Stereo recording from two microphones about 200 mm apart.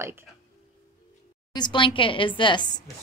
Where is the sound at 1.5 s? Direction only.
20° left (ahead or behind).